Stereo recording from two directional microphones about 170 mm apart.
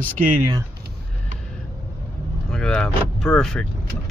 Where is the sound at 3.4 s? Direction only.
Centre (ahead or behind).